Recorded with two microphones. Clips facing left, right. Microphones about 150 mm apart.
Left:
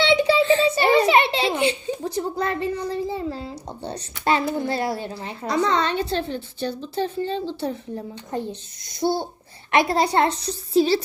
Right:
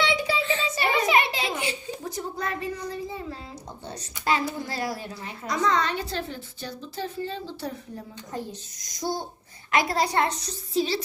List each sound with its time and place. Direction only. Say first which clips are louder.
0.0 s a sound: left 8 dB; 30° left (ahead or behind)
3.9 s a child's voice: left 5 dB; 65° left (ahead or behind)
4.2 s a woman's voice: left 5 dB; 25° left (ahead or behind)